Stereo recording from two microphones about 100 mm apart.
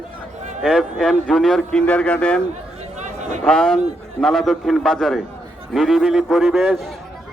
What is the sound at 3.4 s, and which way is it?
A man's voice, 5° left (ahead or behind).